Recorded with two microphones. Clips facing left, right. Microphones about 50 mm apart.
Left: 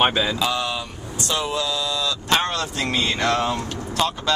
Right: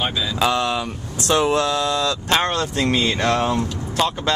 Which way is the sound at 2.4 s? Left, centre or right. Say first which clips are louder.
Right 4 dB; right.